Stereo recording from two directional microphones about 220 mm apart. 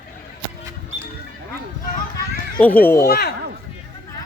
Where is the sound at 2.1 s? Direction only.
5° left (ahead or behind).